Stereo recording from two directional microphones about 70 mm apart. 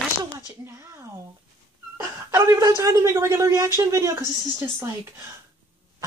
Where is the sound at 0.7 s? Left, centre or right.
Right.